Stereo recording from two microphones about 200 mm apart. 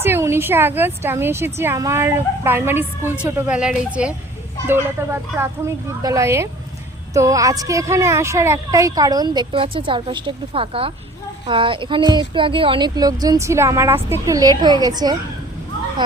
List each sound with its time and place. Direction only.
0.0 s a woman's voice: 10° right (ahead or behind)